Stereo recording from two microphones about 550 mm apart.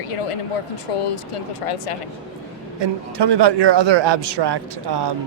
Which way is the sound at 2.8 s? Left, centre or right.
Right.